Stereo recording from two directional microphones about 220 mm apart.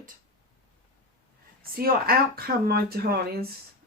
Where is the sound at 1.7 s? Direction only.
40° right (ahead or behind).